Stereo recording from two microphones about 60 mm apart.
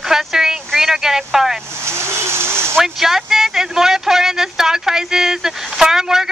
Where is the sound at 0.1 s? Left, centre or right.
Centre.